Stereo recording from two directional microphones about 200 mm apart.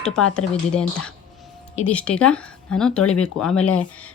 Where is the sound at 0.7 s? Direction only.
Centre (ahead or behind).